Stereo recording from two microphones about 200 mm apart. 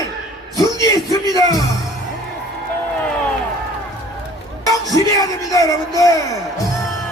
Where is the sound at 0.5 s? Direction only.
20° left (ahead or behind).